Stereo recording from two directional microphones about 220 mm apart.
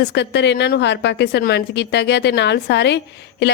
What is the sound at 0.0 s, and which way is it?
A woman's voice, 50° left (ahead or behind).